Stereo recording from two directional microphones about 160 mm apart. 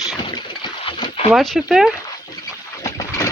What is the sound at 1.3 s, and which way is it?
Speech, centre (ahead or behind).